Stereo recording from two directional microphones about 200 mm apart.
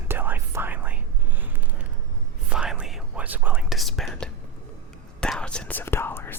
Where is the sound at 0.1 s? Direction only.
10° right (ahead or behind).